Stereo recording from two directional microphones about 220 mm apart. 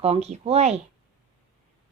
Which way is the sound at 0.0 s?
30° right (ahead or behind).